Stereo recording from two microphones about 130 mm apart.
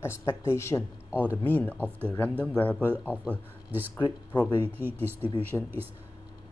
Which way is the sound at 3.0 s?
10° right (ahead or behind).